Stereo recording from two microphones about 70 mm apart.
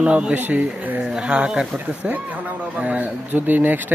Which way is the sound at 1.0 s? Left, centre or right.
Centre.